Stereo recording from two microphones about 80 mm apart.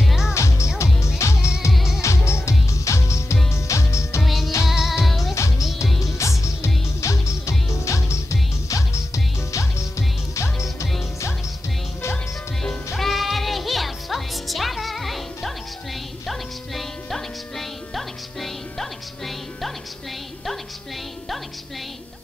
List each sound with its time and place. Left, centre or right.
0.0 s music: centre
0.3 s music: left
1.7 s music: centre
2.0 s music: left
4.2 s music: centre
5.3 s music: left
12.6 s music: centre